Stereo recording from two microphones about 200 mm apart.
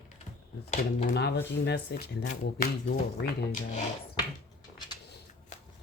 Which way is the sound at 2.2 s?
55° left (ahead or behind).